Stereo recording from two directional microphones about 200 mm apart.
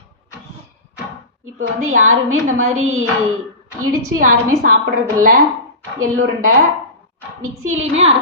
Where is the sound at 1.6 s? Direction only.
90° right.